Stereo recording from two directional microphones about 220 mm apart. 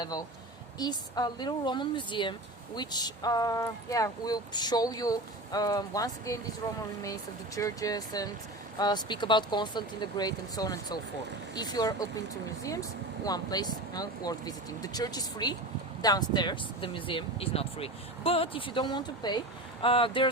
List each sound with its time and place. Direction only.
0.8 s speech: 20° left (ahead or behind)
13.2 s speech: 20° left (ahead or behind)